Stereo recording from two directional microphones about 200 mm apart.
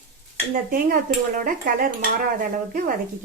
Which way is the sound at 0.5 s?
45° right (ahead or behind).